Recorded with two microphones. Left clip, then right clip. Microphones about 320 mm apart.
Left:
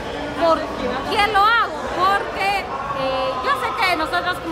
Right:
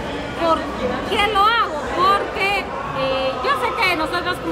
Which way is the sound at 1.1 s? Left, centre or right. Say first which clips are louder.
Left 1 dB; centre.